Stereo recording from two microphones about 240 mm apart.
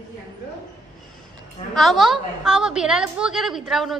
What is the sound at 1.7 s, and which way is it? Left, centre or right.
A woman's voice, centre.